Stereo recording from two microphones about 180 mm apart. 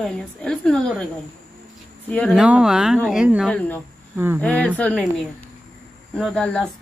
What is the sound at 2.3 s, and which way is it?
Speech, 5° right (ahead or behind).